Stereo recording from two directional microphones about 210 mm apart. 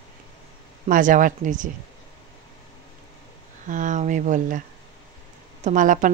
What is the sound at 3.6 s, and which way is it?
Speech, 35° right (ahead or behind).